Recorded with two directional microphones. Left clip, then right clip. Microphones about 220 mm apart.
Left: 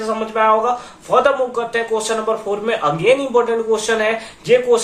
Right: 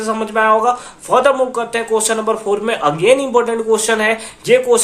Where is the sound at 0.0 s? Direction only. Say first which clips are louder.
Right 1 dB; 45° right (ahead or behind).